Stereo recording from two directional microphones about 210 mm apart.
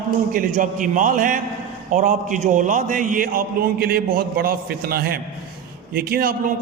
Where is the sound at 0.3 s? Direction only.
40° right (ahead or behind).